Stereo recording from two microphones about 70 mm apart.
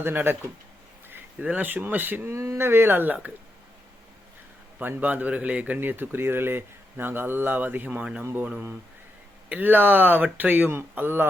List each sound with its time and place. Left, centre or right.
0.0 s speech: right
2.3 s speech: right
4.8 s speech: right
9.5 s speech: right